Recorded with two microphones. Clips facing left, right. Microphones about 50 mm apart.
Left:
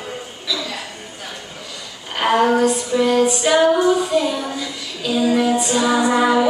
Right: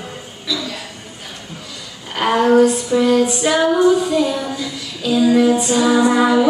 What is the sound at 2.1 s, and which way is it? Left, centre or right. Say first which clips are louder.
Female singing: right 3 dB; centre.